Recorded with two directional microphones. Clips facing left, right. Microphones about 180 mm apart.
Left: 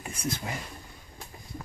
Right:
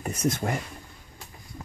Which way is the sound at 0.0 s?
45° right (ahead or behind).